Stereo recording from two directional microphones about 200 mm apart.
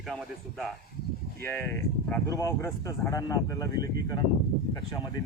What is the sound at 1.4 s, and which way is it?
Speech, 10° left (ahead or behind).